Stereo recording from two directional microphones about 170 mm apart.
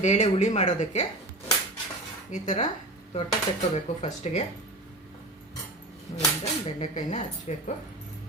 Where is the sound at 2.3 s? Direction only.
45° left (ahead or behind).